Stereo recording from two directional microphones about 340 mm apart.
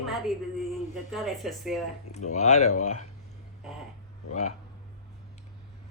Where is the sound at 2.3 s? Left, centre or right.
Centre.